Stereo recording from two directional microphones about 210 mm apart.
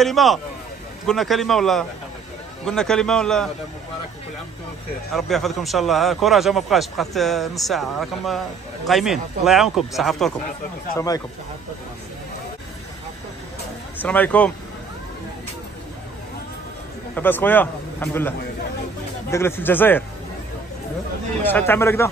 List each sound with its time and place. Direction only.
0.0 s a man's voice: centre (ahead or behind)
5.1 s a man's voice: centre (ahead or behind)
11.0 s speech: 15° left (ahead or behind)
14.0 s speech: 5° left (ahead or behind)
17.1 s speech: 10° left (ahead or behind)
19.3 s speech: 10° left (ahead or behind)
21.4 s speech: 10° left (ahead or behind)